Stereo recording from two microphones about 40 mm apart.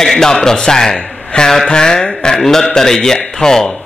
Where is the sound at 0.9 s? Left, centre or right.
Centre.